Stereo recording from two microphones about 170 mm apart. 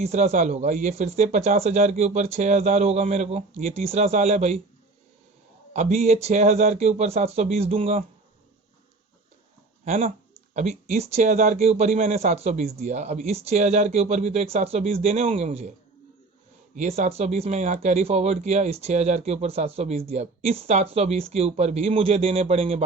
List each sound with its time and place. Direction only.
0.0 s speech: 40° right (ahead or behind)
5.7 s speech: 40° right (ahead or behind)
9.8 s speech: 45° right (ahead or behind)
16.7 s speech: 45° right (ahead or behind)